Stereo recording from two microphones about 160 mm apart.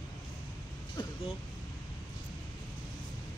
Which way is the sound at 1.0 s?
30° left (ahead or behind).